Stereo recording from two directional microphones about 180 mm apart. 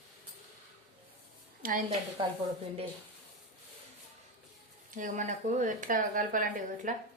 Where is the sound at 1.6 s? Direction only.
45° right (ahead or behind).